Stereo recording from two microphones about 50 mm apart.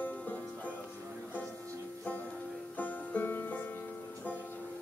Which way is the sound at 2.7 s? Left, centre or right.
Left.